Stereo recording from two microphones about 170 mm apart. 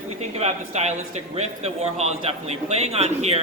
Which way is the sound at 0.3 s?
40° right (ahead or behind).